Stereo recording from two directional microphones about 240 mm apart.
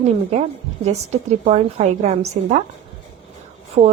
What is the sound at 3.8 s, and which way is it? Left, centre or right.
Speech, right.